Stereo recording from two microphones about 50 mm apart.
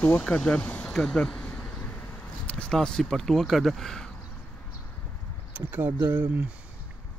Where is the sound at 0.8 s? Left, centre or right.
Centre.